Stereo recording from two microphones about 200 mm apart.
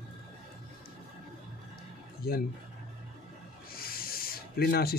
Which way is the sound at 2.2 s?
50° left (ahead or behind).